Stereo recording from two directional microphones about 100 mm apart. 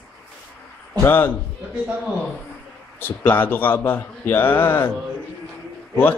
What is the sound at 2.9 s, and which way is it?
Speech, 20° left (ahead or behind).